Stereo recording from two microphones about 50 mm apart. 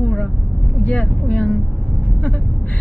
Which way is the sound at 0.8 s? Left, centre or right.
Left.